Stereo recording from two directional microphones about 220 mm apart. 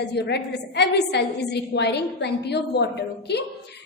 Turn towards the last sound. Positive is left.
turn(degrees=50)  # may be behind; listen again after turning